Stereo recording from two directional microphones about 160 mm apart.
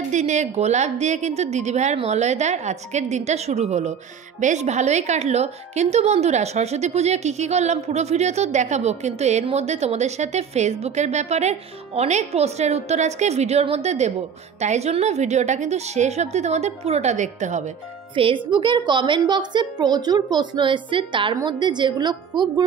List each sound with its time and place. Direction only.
0.1 s a woman's voice: 45° right (ahead or behind)
18.1 s a woman's voice: 35° right (ahead or behind)